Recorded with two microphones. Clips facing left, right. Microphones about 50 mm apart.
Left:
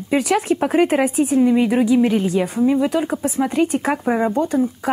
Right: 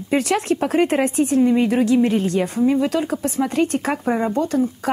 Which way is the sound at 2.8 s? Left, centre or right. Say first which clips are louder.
Left 1 dB; centre.